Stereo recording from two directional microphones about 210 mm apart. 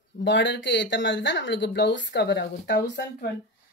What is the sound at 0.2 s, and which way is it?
Speech, 60° left (ahead or behind).